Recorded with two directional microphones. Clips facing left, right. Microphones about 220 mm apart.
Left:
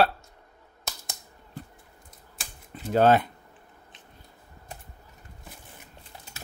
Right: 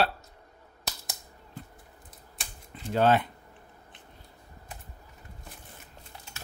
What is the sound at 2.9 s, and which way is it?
Speech, 40° left (ahead or behind).